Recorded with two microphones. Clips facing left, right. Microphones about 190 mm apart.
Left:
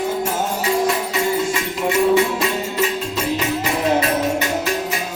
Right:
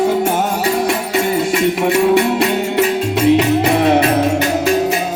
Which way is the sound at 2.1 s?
65° right (ahead or behind).